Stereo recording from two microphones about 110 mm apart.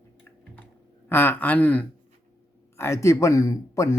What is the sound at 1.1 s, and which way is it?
A man's voice, 15° left (ahead or behind).